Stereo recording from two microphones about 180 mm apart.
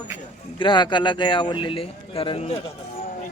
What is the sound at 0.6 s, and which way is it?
Speech, 25° left (ahead or behind).